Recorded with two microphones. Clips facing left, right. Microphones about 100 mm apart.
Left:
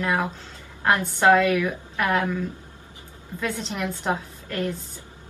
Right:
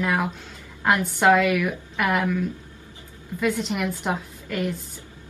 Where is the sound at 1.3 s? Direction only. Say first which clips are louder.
Left 1 dB; 10° right (ahead or behind).